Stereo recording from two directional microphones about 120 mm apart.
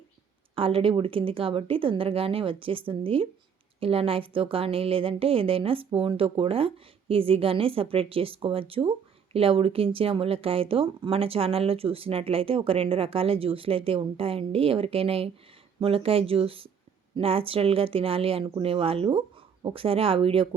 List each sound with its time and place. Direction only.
0.5 s a woman's voice: 50° right (ahead or behind)